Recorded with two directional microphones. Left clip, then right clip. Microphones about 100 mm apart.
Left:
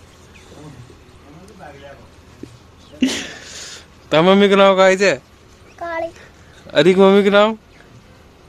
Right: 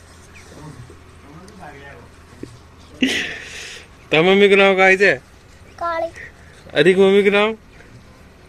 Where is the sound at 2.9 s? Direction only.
40° left (ahead or behind).